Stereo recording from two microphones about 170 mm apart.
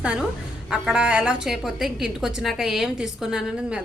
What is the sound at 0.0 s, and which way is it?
A woman's voice, 5° right (ahead or behind).